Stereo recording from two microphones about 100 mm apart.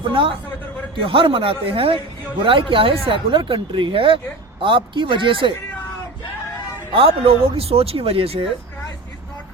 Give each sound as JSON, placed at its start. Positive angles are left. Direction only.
{"t": 0.0, "sound": "speech", "side_deg": -60}
{"t": 6.9, "sound": "speech", "side_deg": -70}